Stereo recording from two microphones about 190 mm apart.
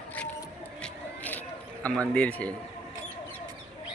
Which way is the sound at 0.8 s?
10° left (ahead or behind).